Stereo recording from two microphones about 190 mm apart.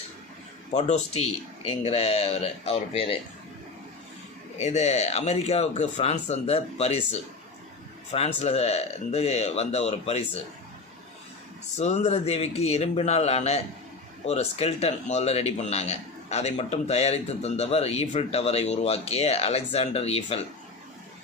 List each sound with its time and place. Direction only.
0.7 s speech: 35° left (ahead or behind)
4.5 s speech: 35° left (ahead or behind)
11.8 s speech: 35° left (ahead or behind)